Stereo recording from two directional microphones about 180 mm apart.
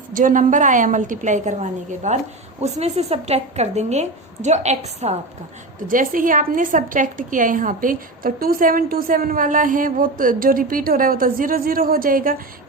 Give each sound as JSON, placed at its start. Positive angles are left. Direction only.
{"t": 0.1, "sound": "a woman's voice", "side_deg": -50}
{"t": 5.9, "sound": "a woman's voice", "side_deg": -50}